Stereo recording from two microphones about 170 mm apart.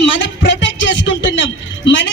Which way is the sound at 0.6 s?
90° left.